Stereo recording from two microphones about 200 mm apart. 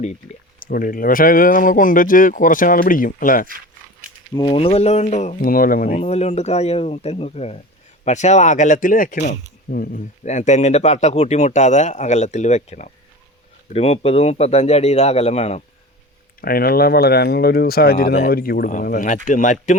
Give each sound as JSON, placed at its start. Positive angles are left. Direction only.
{"t": 0.7, "sound": "speech", "side_deg": 45}
{"t": 4.4, "sound": "speech", "side_deg": 25}
{"t": 6.0, "sound": "speech", "side_deg": 30}
{"t": 16.4, "sound": "speech", "side_deg": 50}